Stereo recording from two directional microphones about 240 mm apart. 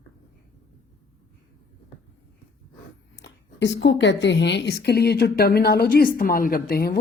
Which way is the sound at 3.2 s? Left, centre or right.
Left.